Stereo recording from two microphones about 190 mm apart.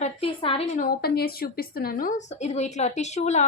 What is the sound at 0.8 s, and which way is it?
Speech, 55° left (ahead or behind).